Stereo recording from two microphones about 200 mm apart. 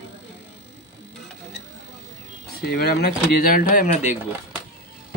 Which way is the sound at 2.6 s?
50° left (ahead or behind).